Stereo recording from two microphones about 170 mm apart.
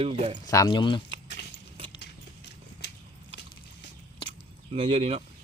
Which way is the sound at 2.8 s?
80° left.